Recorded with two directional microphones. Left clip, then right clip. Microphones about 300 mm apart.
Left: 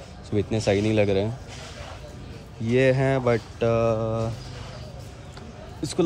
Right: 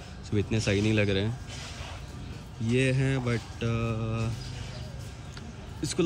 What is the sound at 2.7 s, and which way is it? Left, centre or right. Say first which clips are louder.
Speech: left 8 dB; centre.